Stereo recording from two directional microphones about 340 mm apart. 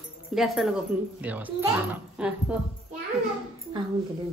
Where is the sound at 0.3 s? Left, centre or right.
Centre.